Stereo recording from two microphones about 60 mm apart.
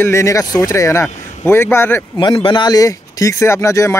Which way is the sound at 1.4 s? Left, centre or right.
Left.